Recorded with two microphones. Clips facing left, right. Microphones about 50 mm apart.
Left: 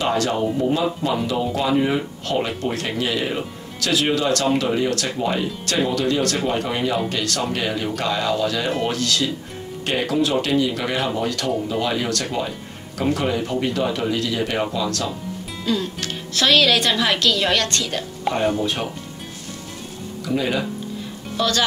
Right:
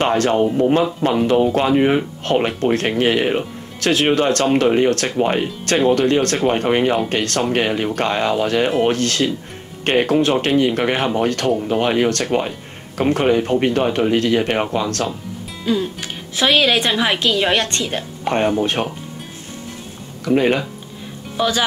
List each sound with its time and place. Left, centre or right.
0.0 s speech: right
15.6 s speech: centre
18.6 s speech: right
20.2 s speech: right
21.4 s speech: centre